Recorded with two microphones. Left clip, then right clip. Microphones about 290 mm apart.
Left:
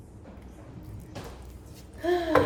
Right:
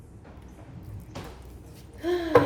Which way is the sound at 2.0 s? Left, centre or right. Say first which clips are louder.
Left 1 dB; centre.